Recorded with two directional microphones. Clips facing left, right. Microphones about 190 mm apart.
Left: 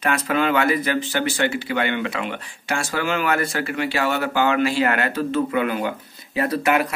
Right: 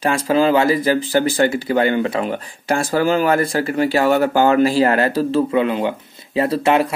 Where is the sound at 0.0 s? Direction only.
30° right (ahead or behind).